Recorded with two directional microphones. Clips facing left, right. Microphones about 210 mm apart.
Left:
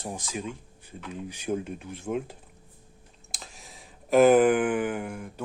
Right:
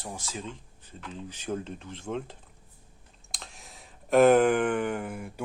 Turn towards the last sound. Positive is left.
turn(degrees=-10)  # may be behind; listen again after turning